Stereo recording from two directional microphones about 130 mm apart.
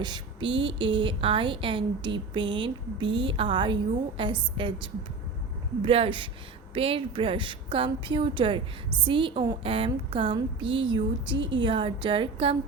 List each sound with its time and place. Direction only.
0.0 s a woman's voice: 35° right (ahead or behind)